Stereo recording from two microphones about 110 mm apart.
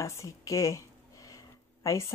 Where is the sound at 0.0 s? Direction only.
30° left (ahead or behind).